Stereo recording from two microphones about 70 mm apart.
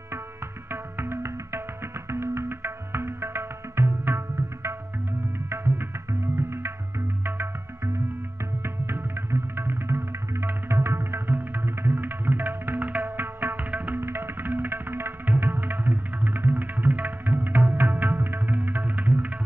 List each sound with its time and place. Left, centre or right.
0.7 s music: right
5.5 s music: right